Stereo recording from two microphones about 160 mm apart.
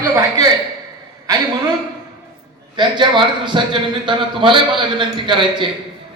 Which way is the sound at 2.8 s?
30° right (ahead or behind).